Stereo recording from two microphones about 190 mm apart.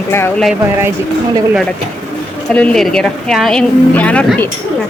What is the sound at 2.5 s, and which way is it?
Speech, 5° left (ahead or behind).